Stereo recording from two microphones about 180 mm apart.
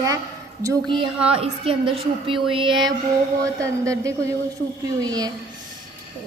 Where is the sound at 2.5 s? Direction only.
25° right (ahead or behind).